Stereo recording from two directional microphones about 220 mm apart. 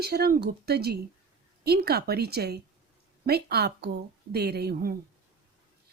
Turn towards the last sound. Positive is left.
turn(degrees=-45)  # may be behind; listen again after turning